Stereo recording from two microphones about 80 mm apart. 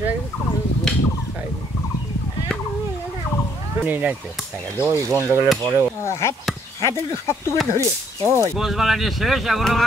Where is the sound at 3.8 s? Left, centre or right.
Right.